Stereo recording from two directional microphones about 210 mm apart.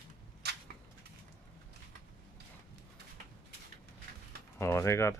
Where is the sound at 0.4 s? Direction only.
50° right (ahead or behind).